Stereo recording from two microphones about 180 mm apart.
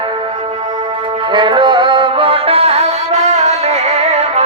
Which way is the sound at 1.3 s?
25° right (ahead or behind).